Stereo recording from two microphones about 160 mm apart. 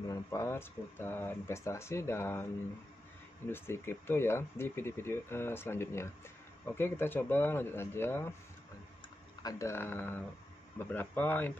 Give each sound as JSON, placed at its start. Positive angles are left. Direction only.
{"t": 0.1, "sound": "speech", "side_deg": 20}
{"t": 3.4, "sound": "speech", "side_deg": 15}
{"t": 9.4, "sound": "speech", "side_deg": 20}